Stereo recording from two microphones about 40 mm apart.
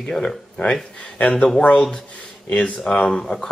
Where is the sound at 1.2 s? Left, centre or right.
Left.